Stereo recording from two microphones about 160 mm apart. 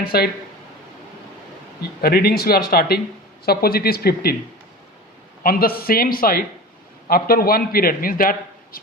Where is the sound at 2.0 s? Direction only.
70° left (ahead or behind).